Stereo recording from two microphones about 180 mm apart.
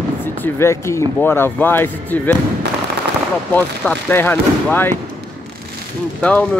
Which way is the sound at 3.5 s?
10° left (ahead or behind).